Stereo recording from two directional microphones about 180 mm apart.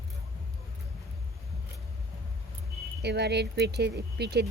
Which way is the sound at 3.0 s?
70° right (ahead or behind).